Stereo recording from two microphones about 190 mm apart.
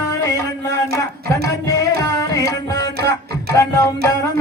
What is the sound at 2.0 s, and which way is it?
Tabla, 15° left (ahead or behind).